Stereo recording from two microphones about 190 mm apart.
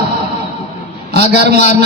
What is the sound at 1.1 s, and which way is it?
Speech, 60° right (ahead or behind).